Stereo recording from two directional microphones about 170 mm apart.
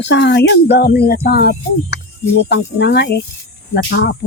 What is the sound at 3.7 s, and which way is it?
Cricket, 70° left (ahead or behind).